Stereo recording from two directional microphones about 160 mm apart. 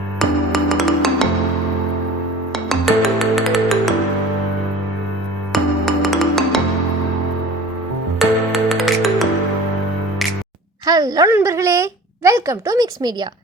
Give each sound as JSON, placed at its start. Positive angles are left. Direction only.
{"t": 0.2, "sound": "music", "side_deg": 0}
{"t": 2.5, "sound": "music", "side_deg": 0}
{"t": 5.5, "sound": "music", "side_deg": 0}
{"t": 8.2, "sound": "music", "side_deg": 0}
{"t": 10.8, "sound": "a sound", "side_deg": -25}
{"t": 11.3, "sound": "a woman's voice", "side_deg": -15}